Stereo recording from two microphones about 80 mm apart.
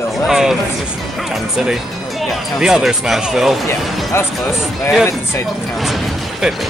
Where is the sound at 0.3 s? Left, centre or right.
Centre.